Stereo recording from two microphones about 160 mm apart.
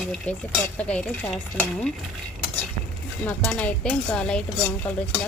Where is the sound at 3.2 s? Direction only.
10° left (ahead or behind).